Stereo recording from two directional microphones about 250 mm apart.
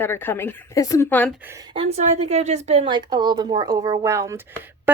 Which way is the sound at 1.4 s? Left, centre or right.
Centre.